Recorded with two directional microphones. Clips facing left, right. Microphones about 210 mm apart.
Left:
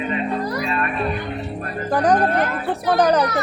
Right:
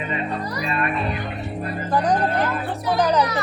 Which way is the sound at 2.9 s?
60° left (ahead or behind).